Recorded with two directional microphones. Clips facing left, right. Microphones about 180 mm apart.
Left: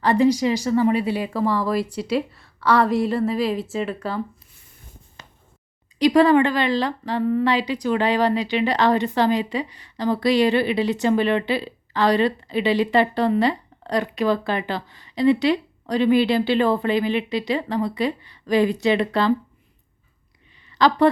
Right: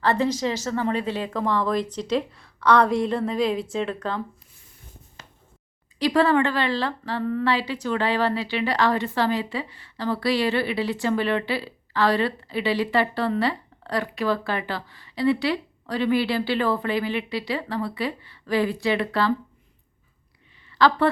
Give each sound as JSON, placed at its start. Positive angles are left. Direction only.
{"t": 0.0, "sound": "speech", "side_deg": 10}
{"t": 6.0, "sound": "a woman's voice", "side_deg": 15}
{"t": 20.7, "sound": "a woman's voice", "side_deg": 20}